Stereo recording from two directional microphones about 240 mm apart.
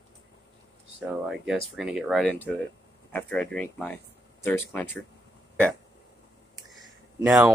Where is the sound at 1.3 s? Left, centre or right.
Centre.